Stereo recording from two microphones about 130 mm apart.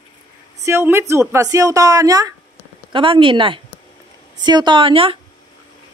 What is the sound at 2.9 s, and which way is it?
A woman's voice, 40° right (ahead or behind).